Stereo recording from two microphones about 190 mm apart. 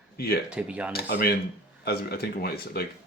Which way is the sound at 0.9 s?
55° left (ahead or behind).